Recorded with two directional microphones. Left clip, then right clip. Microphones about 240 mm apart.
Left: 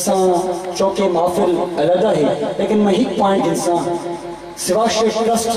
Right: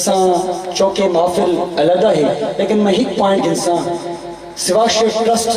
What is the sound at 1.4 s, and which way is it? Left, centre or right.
Speech, right.